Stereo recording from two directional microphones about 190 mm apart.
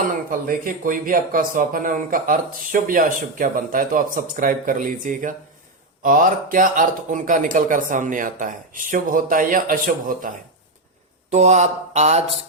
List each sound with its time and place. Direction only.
0.0 s speech: 45° right (ahead or behind)